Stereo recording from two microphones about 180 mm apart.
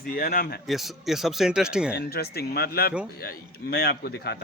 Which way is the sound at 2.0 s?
60° left (ahead or behind).